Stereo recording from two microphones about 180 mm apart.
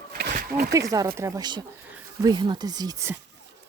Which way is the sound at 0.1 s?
55° right (ahead or behind).